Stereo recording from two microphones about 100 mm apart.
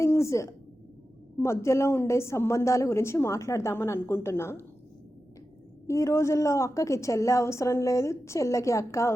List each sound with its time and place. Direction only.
0.0 s a woman's voice: 30° left (ahead or behind)
5.9 s a woman's voice: 30° left (ahead or behind)